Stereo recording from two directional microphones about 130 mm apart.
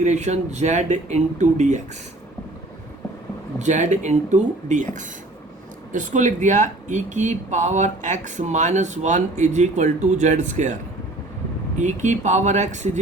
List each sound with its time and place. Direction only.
0.0 s speech: 60° right (ahead or behind)
3.6 s speech: 65° right (ahead or behind)
5.9 s speech: 75° right (ahead or behind)
11.8 s speech: 65° right (ahead or behind)